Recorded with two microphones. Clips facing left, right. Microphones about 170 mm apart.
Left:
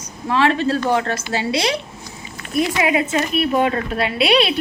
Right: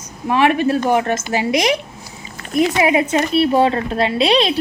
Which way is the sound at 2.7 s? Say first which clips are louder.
Right 3 dB; 25° right (ahead or behind).